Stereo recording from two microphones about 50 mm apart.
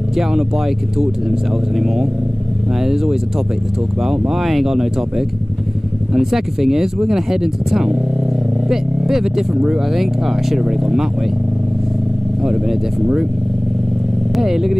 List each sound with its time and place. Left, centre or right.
0.1 s speech: centre
4.3 s speech: centre
13.0 s speech: centre
14.3 s speech: centre